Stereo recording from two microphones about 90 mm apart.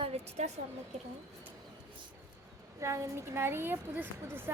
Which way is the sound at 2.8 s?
35° right (ahead or behind).